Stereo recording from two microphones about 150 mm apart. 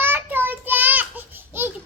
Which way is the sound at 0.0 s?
15° right (ahead or behind).